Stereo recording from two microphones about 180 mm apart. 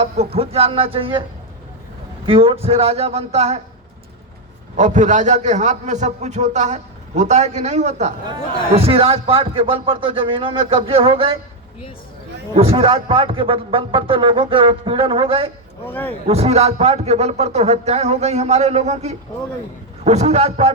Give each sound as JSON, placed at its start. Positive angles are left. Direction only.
{"t": 0.0, "sound": "a man's voice", "side_deg": -35}
{"t": 2.2, "sound": "a man's voice", "side_deg": -30}
{"t": 4.8, "sound": "a man's voice", "side_deg": -40}
{"t": 12.5, "sound": "a man's voice", "side_deg": -30}
{"t": 15.9, "sound": "speech", "side_deg": 10}
{"t": 16.2, "sound": "a man's voice", "side_deg": -35}